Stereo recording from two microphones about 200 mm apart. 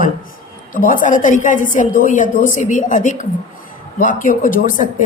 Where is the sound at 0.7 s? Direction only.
40° left (ahead or behind).